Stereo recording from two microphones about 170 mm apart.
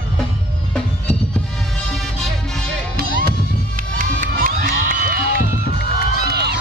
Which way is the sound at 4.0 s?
50° right (ahead or behind).